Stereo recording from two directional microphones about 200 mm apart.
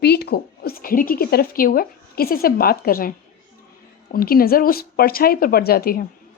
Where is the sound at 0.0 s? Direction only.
55° left (ahead or behind).